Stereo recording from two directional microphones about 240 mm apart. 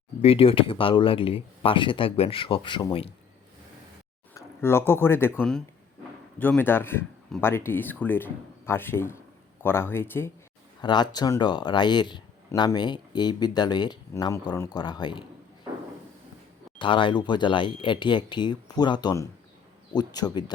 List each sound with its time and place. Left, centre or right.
0.2 s speech: left
4.4 s speech: centre
16.7 s speech: left